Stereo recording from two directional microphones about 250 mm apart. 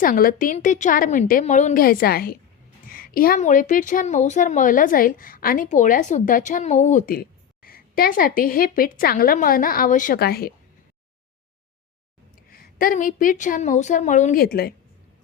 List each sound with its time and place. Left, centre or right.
0.0 s a woman's voice: left
12.5 s a woman's voice: left